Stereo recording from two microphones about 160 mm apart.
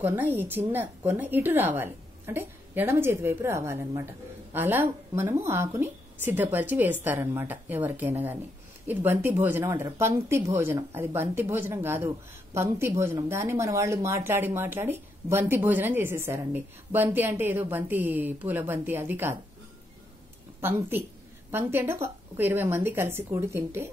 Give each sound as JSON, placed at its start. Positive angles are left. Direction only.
{"t": 0.0, "sound": "a woman's voice", "side_deg": -10}
{"t": 20.6, "sound": "a woman's voice", "side_deg": -15}